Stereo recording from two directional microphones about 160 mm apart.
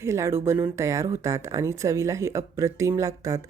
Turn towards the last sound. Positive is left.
turn(degrees=-20)  # may be behind; listen again after turning